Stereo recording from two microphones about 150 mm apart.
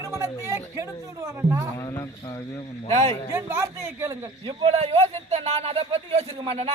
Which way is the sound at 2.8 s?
50° right (ahead or behind).